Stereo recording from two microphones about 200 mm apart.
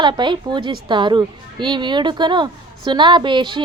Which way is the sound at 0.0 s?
25° right (ahead or behind).